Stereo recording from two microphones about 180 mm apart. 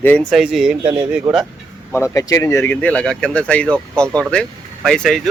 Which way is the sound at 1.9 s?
15° left (ahead or behind).